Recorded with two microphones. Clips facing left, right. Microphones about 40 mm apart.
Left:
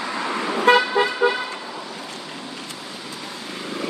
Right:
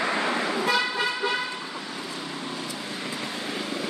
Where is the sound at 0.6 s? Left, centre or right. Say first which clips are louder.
Left 12 dB; left.